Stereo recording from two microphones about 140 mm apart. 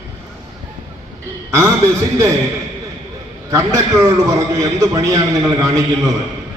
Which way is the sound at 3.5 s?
25° right (ahead or behind).